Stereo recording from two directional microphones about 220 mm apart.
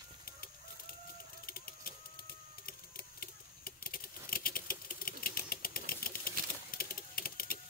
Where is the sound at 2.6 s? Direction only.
40° left (ahead or behind).